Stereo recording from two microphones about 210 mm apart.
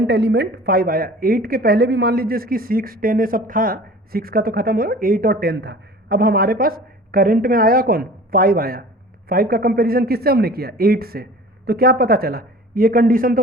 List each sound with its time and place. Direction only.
0.0 s speech: 55° right (ahead or behind)